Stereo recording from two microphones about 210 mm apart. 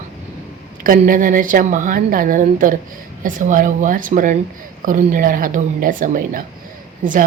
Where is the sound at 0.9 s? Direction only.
40° right (ahead or behind).